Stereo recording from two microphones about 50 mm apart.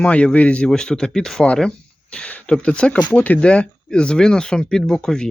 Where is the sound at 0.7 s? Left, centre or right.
Centre.